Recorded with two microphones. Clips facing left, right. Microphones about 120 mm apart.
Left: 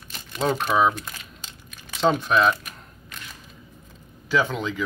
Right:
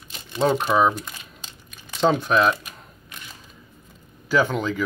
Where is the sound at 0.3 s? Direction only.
5° right (ahead or behind).